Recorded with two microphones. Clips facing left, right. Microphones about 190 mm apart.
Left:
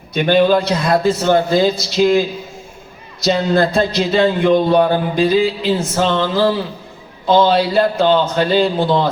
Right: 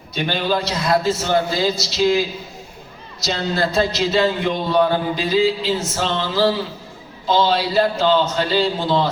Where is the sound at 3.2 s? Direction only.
55° left (ahead or behind).